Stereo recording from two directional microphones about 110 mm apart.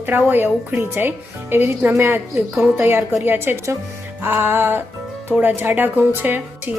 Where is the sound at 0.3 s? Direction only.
20° right (ahead or behind).